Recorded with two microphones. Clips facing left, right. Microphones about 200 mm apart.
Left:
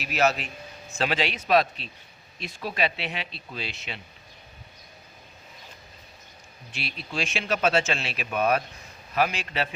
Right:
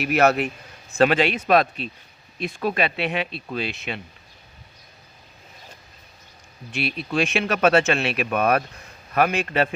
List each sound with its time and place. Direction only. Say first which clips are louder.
0.0 s speech: right 6 dB; 60° right (ahead or behind)
6.7 s speech: right 9 dB; 60° right (ahead or behind)